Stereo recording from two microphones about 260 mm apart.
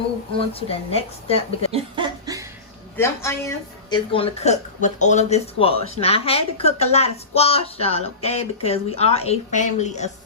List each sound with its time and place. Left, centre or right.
0.3 s speech: left
1.7 s a sound: centre
2.9 s speech: centre; by 10.1 s left